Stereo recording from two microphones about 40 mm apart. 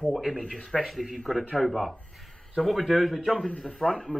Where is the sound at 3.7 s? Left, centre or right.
Centre.